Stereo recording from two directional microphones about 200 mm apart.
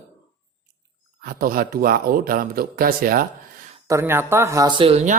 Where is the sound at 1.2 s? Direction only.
45° right (ahead or behind).